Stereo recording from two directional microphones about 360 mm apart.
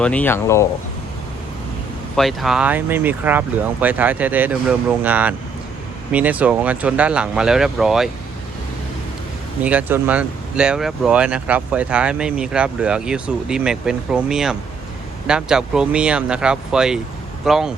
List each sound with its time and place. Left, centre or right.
0.0 s speech: centre
2.1 s speech: centre
9.6 s speech: centre